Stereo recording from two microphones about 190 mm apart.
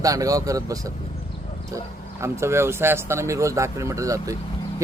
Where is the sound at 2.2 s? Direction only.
15° right (ahead or behind).